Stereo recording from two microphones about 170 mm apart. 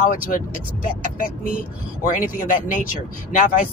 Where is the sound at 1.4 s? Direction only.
55° left (ahead or behind).